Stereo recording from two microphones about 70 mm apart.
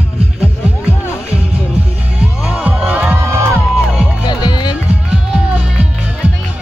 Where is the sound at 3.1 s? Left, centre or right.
Right.